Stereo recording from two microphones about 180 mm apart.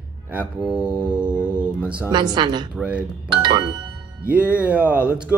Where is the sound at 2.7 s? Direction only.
5° right (ahead or behind).